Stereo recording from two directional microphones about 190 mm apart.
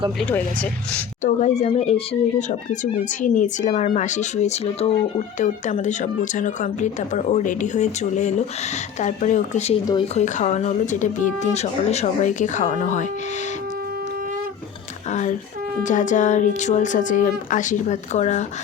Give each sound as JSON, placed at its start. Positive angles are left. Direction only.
{"t": 0.2, "sound": "speech", "side_deg": 5}
{"t": 1.2, "sound": "speech", "side_deg": 35}
{"t": 15.8, "sound": "speech", "side_deg": 40}